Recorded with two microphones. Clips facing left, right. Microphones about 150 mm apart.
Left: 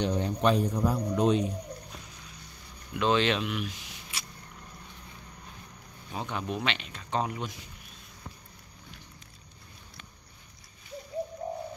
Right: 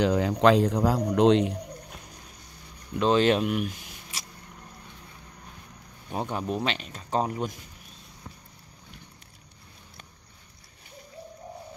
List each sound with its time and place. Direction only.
0.0 s a man's voice: 90° right
3.0 s speech: 40° right (ahead or behind)
6.1 s speech: 40° right (ahead or behind)